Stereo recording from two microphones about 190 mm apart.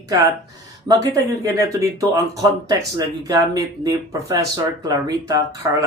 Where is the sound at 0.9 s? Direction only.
20° right (ahead or behind).